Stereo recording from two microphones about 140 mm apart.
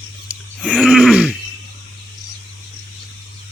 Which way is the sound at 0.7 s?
Centre (ahead or behind).